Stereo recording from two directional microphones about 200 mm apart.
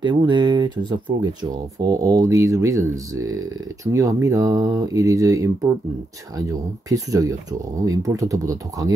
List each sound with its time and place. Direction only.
0.0 s speech: 20° right (ahead or behind)